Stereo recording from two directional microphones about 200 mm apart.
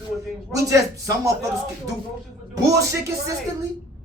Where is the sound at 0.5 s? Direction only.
15° right (ahead or behind).